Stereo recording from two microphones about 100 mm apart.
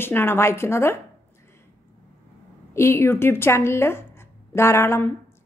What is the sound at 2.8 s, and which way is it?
A woman's voice, 25° left (ahead or behind).